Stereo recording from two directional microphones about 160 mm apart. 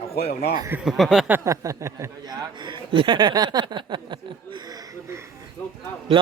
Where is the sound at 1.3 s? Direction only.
20° right (ahead or behind).